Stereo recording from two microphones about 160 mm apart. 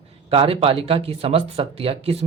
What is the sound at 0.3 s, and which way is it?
Speech, 35° right (ahead or behind).